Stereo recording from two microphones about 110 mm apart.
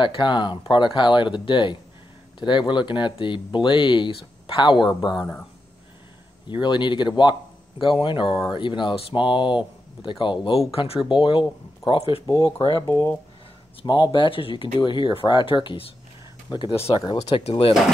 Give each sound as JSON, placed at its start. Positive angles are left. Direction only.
{"t": 0.0, "sound": "speech", "side_deg": 45}
{"t": 6.4, "sound": "speech", "side_deg": 45}
{"t": 10.7, "sound": "speech", "side_deg": 60}
{"t": 11.1, "sound": "speech", "side_deg": 50}
{"t": 12.8, "sound": "speech", "side_deg": 30}
{"t": 13.8, "sound": "speech", "side_deg": 40}
{"t": 17.4, "sound": "speech", "side_deg": 65}